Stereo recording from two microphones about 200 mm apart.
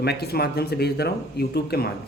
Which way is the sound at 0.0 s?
55° left (ahead or behind).